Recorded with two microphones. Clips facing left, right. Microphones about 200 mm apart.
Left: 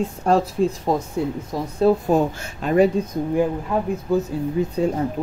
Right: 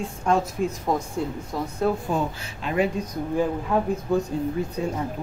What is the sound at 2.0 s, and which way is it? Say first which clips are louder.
Speech: left 7 dB; 45° left (ahead or behind).